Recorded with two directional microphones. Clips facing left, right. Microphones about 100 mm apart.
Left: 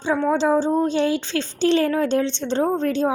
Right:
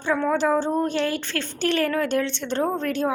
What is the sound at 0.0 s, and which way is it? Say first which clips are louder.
A woman's voice: left 2 dB; 15° left (ahead or behind).